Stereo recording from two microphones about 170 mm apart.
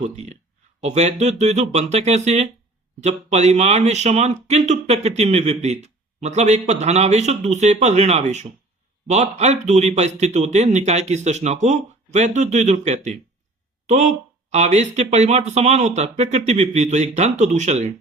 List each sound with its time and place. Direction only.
0.0 s a man's voice: 40° right (ahead or behind)